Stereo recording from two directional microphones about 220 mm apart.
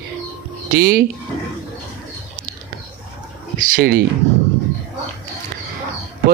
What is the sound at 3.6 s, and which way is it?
Speech, 40° right (ahead or behind).